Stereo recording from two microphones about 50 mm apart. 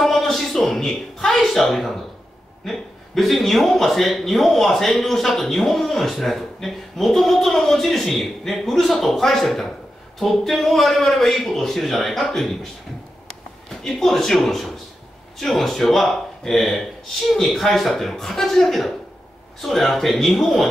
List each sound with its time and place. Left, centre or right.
0.0 s a man's voice: centre
13.8 s a man's voice: centre